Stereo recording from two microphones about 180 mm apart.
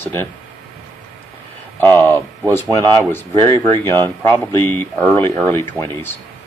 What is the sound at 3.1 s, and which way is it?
Speech, 15° left (ahead or behind).